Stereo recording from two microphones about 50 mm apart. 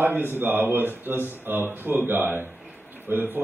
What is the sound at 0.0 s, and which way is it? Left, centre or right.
Speech, right.